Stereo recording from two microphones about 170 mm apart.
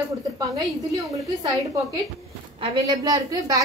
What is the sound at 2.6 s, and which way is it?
A woman's voice, 25° right (ahead or behind).